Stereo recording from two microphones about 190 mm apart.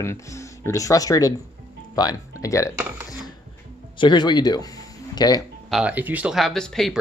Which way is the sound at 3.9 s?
25° left (ahead or behind).